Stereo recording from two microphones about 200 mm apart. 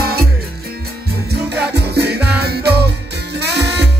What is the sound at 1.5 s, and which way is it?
Music, 55° right (ahead or behind).